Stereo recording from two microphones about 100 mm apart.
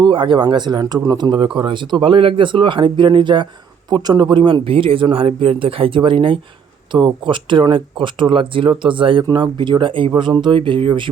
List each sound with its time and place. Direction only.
0.0 s speech: 55° right (ahead or behind)